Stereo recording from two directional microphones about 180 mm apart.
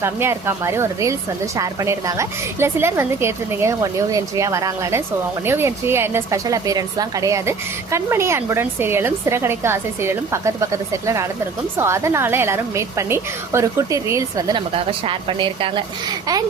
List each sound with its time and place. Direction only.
0.0 s a woman's voice: 15° right (ahead or behind); by 15.8 s 30° right (ahead or behind)